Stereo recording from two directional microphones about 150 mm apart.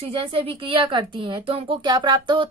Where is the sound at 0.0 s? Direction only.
35° right (ahead or behind).